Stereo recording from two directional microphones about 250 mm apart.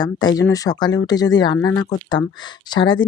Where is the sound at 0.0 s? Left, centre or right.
Centre.